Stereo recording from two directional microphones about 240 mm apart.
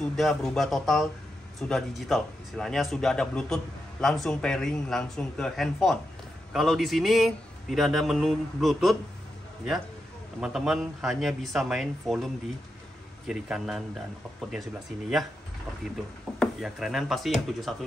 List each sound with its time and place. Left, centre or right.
0.1 s speech: centre
10.4 s speech: centre
13.3 s speech: centre
16.3 s speech: centre